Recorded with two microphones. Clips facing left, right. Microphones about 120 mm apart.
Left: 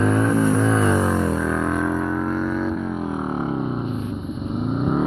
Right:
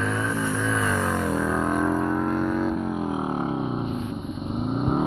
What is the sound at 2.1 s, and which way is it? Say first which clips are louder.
Music: left 1 dB; 15° right (ahead or behind).